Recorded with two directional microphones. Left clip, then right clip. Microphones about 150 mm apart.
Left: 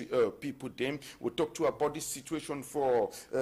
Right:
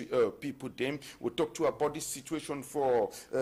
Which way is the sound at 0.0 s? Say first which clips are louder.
Even; 30° right (ahead or behind).